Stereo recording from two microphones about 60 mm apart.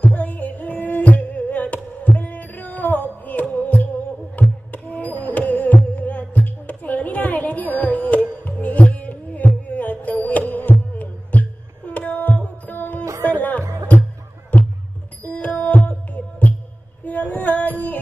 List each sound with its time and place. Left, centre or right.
0.0 s music: left
4.4 s a sound: left
4.8 s music: left
15.2 s music: left
17.0 s female singing: left